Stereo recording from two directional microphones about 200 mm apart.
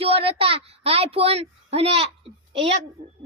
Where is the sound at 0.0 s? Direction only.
30° right (ahead or behind).